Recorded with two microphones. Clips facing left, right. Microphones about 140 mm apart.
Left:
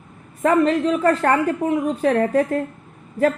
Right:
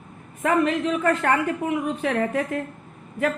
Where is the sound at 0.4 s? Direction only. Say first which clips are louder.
Left 4 dB; 40° left (ahead or behind).